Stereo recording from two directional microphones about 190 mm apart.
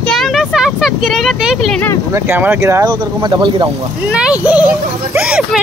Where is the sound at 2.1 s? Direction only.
10° right (ahead or behind).